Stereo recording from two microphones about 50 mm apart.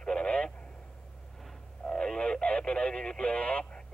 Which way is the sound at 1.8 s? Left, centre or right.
Centre.